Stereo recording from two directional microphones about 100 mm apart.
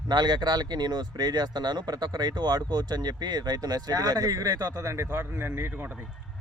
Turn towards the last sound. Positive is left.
turn(degrees=-25)  # may be behind; listen again after turning